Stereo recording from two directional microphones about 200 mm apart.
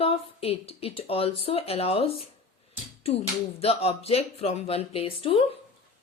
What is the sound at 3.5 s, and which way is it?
A woman's voice, 30° left (ahead or behind).